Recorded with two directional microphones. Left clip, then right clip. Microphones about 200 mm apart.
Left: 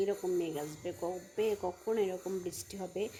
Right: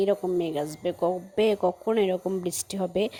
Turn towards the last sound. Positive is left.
turn(degrees=-40)  # may be behind; listen again after turning